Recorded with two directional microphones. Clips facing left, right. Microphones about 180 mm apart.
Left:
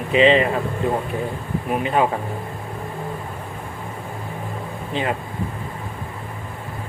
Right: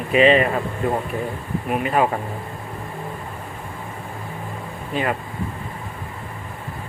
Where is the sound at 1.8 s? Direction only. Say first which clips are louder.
Even; 25° left (ahead or behind).